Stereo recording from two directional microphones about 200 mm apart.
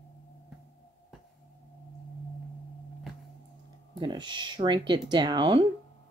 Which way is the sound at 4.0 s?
25° right (ahead or behind).